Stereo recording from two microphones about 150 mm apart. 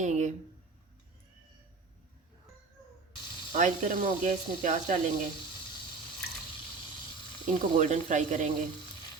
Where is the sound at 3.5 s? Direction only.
60° right (ahead or behind).